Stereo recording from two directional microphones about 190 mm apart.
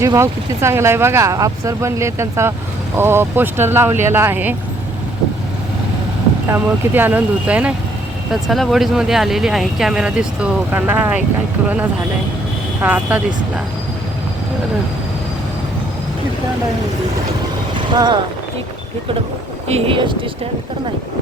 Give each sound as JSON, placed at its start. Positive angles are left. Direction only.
{"t": 0.0, "sound": "speech", "side_deg": -15}
{"t": 6.5, "sound": "speech", "side_deg": -10}
{"t": 12.8, "sound": "speech", "side_deg": -10}
{"t": 17.9, "sound": "speech", "side_deg": -20}
{"t": 19.6, "sound": "speech", "side_deg": -30}